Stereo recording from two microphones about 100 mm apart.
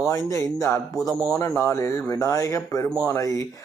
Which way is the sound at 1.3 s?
30° left (ahead or behind).